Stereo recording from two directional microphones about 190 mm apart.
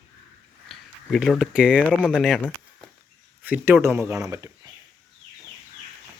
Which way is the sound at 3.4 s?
10° right (ahead or behind).